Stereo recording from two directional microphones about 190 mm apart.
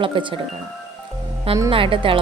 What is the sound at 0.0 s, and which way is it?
Speech, 25° right (ahead or behind).